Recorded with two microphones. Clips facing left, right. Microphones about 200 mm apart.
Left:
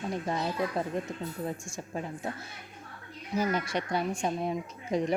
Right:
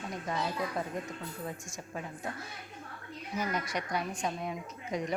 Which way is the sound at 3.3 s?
30° left (ahead or behind).